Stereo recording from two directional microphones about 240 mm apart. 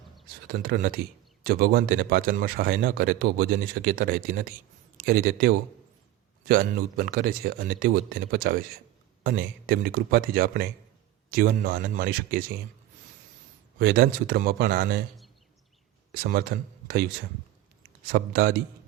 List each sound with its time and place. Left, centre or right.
0.4 s a man's voice: right
13.7 s speech: right
16.1 s speech: right
18.1 s speech: right